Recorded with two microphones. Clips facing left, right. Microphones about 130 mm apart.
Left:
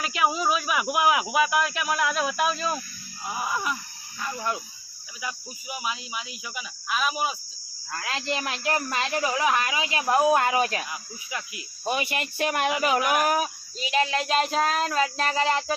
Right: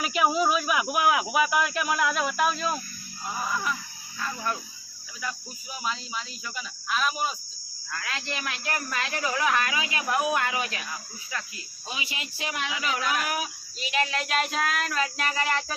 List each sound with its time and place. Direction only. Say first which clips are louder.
0.0 s speech: right 1 dB; centre (ahead or behind)
3.2 s speech: left 1 dB; 15° left (ahead or behind)
7.9 s speech: left 4 dB; 30° left (ahead or behind)
11.3 s speech: left 1 dB; 15° left (ahead or behind)
11.9 s speech: left 9 dB; 55° left (ahead or behind)
13.2 s child singing: left 7 dB; 40° left (ahead or behind)
13.9 s child singing: left 4 dB; 30° left (ahead or behind)